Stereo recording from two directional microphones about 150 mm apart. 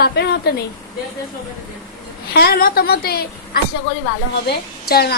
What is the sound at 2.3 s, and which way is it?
A woman's voice, 90° left.